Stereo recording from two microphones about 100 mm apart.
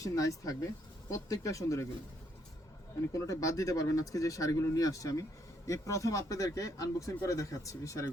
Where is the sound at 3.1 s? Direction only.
35° left (ahead or behind).